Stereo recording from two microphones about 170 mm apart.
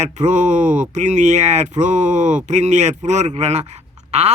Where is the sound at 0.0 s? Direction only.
45° right (ahead or behind).